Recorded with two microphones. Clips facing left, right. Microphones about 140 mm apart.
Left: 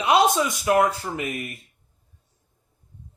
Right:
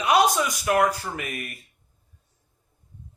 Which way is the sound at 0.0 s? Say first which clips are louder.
Left 1 dB; 25° left (ahead or behind).